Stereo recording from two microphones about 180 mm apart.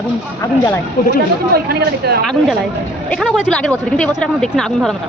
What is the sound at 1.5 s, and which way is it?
Speech, 60° right (ahead or behind).